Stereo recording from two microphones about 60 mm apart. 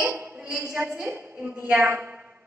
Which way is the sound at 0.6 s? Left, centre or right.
Right.